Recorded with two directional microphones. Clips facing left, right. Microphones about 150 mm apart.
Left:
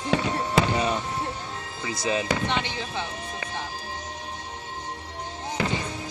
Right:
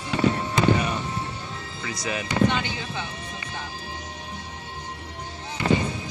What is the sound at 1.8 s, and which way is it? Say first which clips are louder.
Speech: left 4 dB; 25° left (ahead or behind).